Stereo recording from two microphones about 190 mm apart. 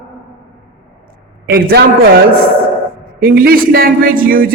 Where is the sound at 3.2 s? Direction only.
50° right (ahead or behind).